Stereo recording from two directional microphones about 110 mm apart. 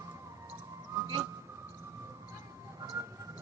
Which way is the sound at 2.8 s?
30° right (ahead or behind).